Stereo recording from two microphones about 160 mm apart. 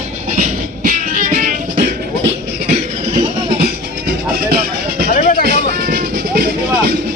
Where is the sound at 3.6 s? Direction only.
75° right (ahead or behind).